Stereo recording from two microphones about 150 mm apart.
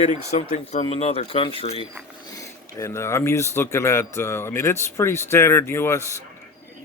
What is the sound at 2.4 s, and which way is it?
Speech, 20° left (ahead or behind).